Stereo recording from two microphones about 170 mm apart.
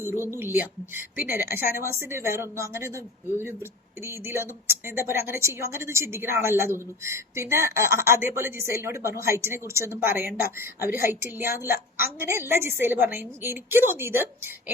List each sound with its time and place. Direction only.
0.0 s speech: 15° right (ahead or behind)